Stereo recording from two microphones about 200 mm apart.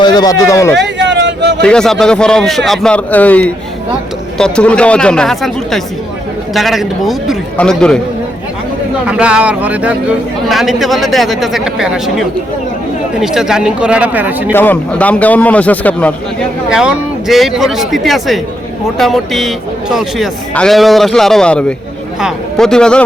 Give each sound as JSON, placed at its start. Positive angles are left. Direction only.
{"t": 0.0, "sound": "speech", "side_deg": 20}
{"t": 0.8, "sound": "a sound", "side_deg": -60}
{"t": 1.6, "sound": "speech", "side_deg": 5}
{"t": 9.0, "sound": "speech", "side_deg": -5}
{"t": 13.2, "sound": "speech", "side_deg": -5}
{"t": 14.5, "sound": "a man's voice", "side_deg": 10}
{"t": 16.6, "sound": "speech", "side_deg": -5}